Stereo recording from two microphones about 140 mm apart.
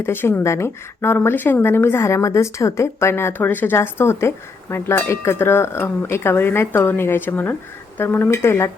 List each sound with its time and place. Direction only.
0.0 s a woman's voice: 15° left (ahead or behind)